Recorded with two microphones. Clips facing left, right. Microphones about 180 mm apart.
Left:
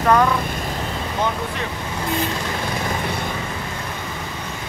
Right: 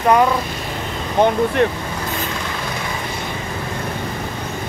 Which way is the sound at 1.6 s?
65° right (ahead or behind).